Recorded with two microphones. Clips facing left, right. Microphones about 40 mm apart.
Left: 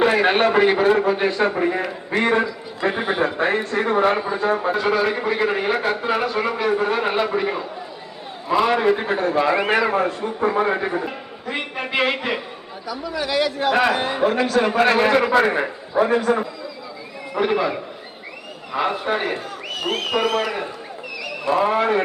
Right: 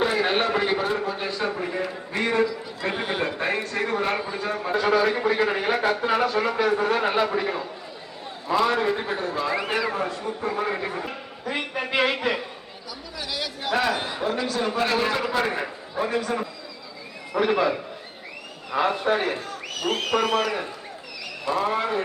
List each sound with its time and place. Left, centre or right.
0.0 s a man's voice: centre; by 2.4 s left
2.9 s a man's voice: centre
3.3 s a man's voice: left
4.4 s a man's voice: left
4.7 s a man's voice: centre; by 11.0 s left
11.0 s a man's voice: centre
14.8 s a man's voice: left
15.3 s a man's voice: left
16.0 s a man's voice: left
17.3 s a man's voice: centre
21.5 s a man's voice: left